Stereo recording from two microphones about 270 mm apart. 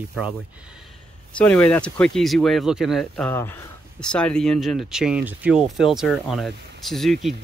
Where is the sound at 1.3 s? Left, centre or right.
Centre.